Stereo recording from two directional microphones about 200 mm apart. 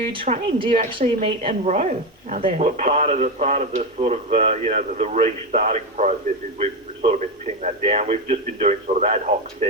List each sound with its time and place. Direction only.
0.0 s a woman's voice: 25° right (ahead or behind)